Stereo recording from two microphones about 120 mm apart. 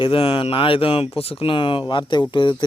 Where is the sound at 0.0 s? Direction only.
50° left (ahead or behind).